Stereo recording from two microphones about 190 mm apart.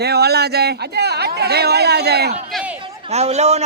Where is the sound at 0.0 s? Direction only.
60° right (ahead or behind).